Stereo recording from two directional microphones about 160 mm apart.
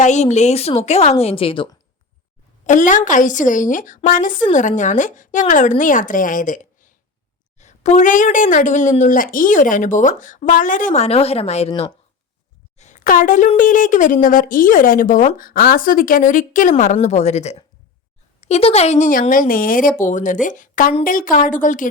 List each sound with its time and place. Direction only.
0.0 s a woman's voice: 45° left (ahead or behind)
2.6 s a woman's voice: 55° left (ahead or behind)
12.7 s a woman's voice: 50° left (ahead or behind)